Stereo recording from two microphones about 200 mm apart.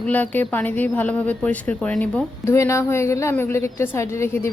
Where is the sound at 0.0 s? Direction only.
10° left (ahead or behind).